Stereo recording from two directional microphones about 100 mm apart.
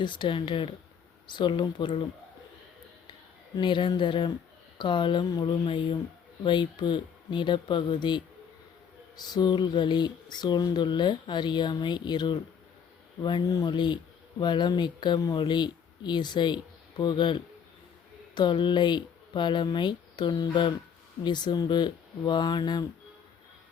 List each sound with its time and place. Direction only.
0.0 s speech: 50° left (ahead or behind)
3.5 s speech: 50° left (ahead or behind)